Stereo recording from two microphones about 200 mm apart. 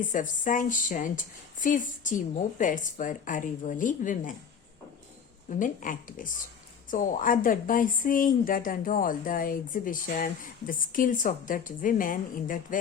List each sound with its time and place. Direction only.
0.0 s speech: 40° left (ahead or behind)
5.5 s a woman's voice: 40° left (ahead or behind)